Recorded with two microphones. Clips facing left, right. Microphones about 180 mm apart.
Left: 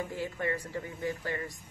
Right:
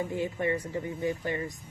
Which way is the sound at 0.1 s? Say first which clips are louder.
Right 4 dB; 20° right (ahead or behind).